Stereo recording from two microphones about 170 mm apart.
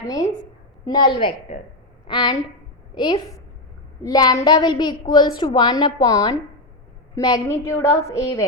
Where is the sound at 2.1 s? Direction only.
25° left (ahead or behind).